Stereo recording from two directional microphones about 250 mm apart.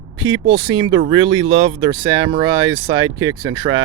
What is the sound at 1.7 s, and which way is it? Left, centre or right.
Speech, centre.